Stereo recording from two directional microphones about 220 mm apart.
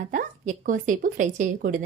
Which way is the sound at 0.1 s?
35° right (ahead or behind).